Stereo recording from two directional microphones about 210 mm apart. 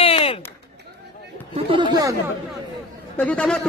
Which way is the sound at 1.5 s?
25° right (ahead or behind).